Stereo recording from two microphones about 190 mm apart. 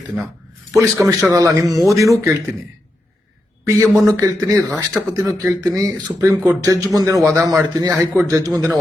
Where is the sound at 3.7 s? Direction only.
15° right (ahead or behind).